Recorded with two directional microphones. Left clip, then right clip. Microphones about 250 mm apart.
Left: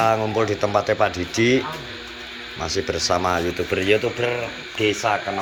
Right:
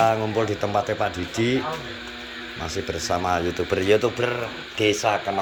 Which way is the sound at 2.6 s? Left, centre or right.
Centre.